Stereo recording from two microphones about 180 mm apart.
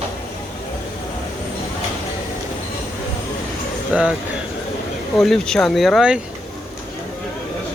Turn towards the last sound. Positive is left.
turn(degrees=-5)  # may be behind; listen again after turning